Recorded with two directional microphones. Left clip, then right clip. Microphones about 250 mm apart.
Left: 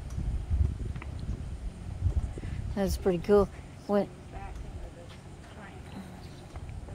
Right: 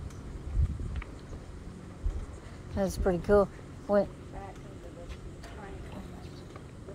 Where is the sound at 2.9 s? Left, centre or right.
Centre.